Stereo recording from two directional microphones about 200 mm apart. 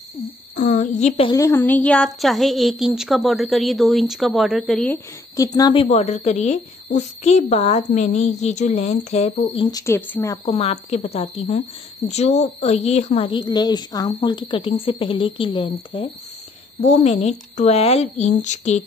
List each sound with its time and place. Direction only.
0.2 s speech: 35° left (ahead or behind)
1.3 s a woman's voice: 15° left (ahead or behind); by 9.3 s 35° left (ahead or behind)
9.6 s a woman's voice: 20° left (ahead or behind)
10.4 s a woman's voice: 30° left (ahead or behind)